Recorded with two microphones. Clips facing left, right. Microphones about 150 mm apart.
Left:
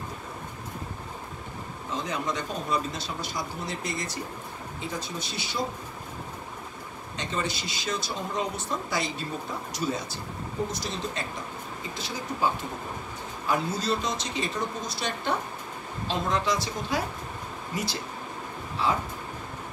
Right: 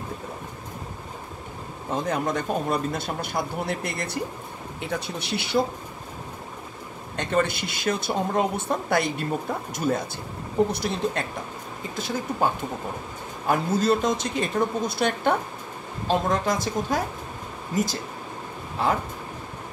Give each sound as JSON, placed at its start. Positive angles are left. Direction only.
{"t": 1.9, "sound": "speech", "side_deg": -55}
{"t": 7.2, "sound": "speech", "side_deg": -55}
{"t": 13.5, "sound": "speech", "side_deg": -50}
{"t": 18.8, "sound": "speech", "side_deg": -55}